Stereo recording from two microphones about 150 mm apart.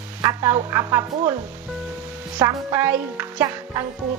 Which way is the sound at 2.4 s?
25° right (ahead or behind).